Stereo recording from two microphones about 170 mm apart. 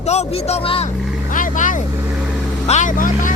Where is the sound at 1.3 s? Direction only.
50° left (ahead or behind).